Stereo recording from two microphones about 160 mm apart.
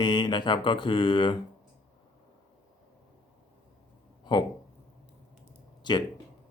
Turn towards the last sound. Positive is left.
turn(degrees=30)  # may be behind; listen again after turning